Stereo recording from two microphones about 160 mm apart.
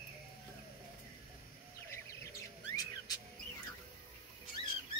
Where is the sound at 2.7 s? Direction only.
20° left (ahead or behind).